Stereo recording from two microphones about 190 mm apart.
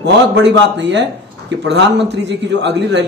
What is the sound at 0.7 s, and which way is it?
A man's voice, 65° right (ahead or behind).